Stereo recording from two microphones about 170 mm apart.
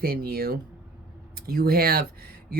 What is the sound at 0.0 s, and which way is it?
Speech, 60° right (ahead or behind).